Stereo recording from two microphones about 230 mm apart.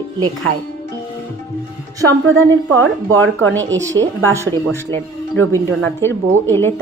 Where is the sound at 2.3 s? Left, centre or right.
Right.